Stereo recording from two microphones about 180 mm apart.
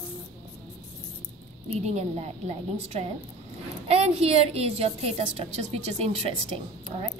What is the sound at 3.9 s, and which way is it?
A woman's voice, 35° right (ahead or behind).